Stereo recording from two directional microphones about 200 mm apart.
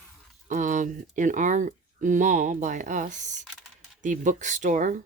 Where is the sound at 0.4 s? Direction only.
40° right (ahead or behind).